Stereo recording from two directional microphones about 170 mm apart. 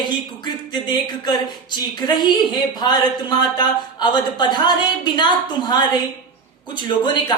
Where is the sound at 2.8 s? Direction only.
25° left (ahead or behind).